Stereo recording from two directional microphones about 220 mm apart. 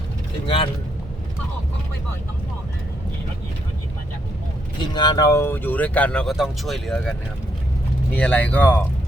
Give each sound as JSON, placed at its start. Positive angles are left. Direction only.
{"t": 0.4, "sound": "speech", "side_deg": 25}
{"t": 4.9, "sound": "speech", "side_deg": 20}